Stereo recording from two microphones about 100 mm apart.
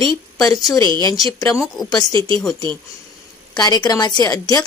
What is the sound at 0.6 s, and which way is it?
Speech, 40° left (ahead or behind).